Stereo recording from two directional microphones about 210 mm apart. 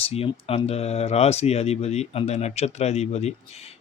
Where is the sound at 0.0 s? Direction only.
30° left (ahead or behind).